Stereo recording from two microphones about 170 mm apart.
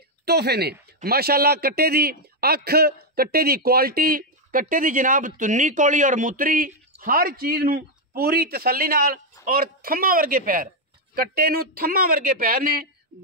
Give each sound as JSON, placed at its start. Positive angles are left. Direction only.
{"t": 0.2, "sound": "a man's voice", "side_deg": -70}